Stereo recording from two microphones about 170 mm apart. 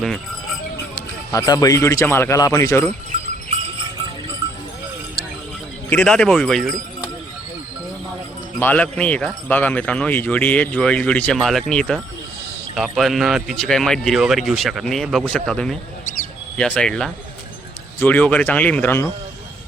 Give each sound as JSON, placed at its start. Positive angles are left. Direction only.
{"t": 0.9, "sound": "a man's voice", "side_deg": 20}
{"t": 5.9, "sound": "speech", "side_deg": 10}
{"t": 8.5, "sound": "a man's voice", "side_deg": 10}